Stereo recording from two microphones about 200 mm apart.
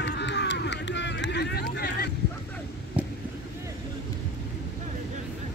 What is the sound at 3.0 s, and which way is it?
Vehicle, 5° right (ahead or behind).